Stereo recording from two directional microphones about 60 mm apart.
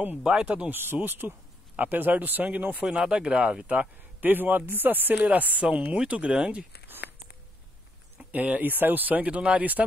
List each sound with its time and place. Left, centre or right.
0.2 s speech: centre
0.7 s speech: right
2.8 s speech: centre
4.2 s speech: right
8.3 s speech: right